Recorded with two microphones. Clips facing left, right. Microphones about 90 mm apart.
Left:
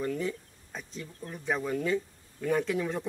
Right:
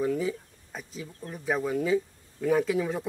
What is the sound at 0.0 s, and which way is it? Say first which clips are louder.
Speech: right 4 dB; 5° right (ahead or behind).